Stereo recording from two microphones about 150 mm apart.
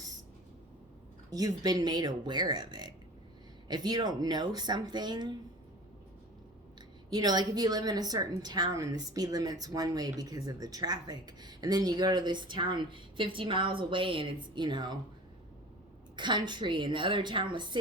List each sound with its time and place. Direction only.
1.3 s a woman's voice: 25° right (ahead or behind)
7.1 s a woman's voice: 25° right (ahead or behind)
16.1 s a woman's voice: 30° right (ahead or behind)